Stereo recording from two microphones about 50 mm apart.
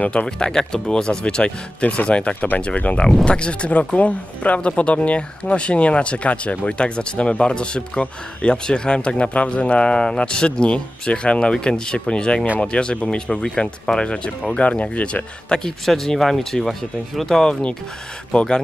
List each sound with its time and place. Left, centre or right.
0.0 s speech: left
0.4 s speech: centre
15.8 s speech: centre